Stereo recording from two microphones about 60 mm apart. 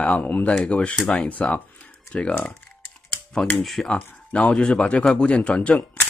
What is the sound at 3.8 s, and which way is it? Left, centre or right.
Speech, left.